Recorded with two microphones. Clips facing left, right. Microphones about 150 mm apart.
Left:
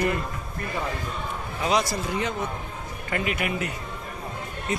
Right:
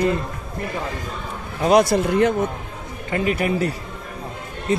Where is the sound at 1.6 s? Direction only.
55° right (ahead or behind).